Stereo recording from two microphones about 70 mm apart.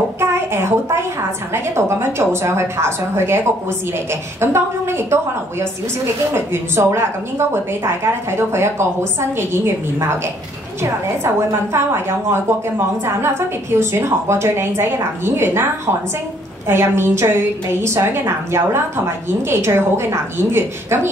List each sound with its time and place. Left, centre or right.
0.2 s a child's voice: right
16.6 s a woman's voice: right